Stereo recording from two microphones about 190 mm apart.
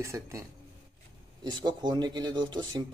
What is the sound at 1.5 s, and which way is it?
Speech, 20° right (ahead or behind).